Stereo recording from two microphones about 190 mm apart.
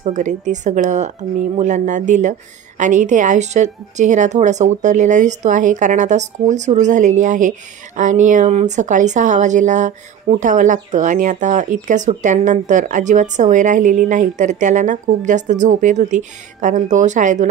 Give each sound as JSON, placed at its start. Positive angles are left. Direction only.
{"t": 0.1, "sound": "a woman's voice", "side_deg": -40}